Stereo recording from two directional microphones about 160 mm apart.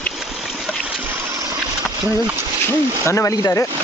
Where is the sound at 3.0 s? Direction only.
15° left (ahead or behind).